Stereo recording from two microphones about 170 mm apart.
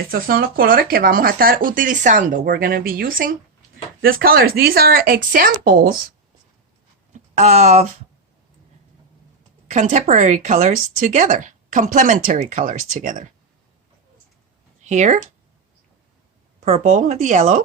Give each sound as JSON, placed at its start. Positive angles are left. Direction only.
{"t": 0.1, "sound": "speech", "side_deg": -60}
{"t": 7.1, "sound": "a sound", "side_deg": -40}
{"t": 9.6, "sound": "speech", "side_deg": -45}
{"t": 14.8, "sound": "speech", "side_deg": -45}
{"t": 16.6, "sound": "speech", "side_deg": -45}